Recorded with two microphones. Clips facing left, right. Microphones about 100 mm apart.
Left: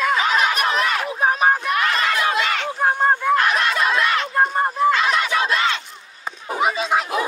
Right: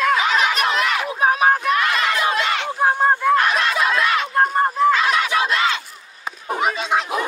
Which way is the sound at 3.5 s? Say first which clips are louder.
Even; centre (ahead or behind).